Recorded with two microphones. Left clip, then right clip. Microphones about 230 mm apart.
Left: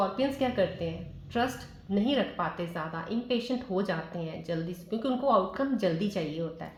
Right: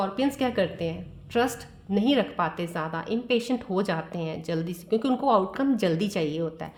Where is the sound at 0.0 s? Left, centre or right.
Right.